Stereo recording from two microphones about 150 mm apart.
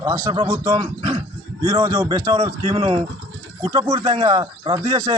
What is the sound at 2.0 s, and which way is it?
Speech, 35° right (ahead or behind).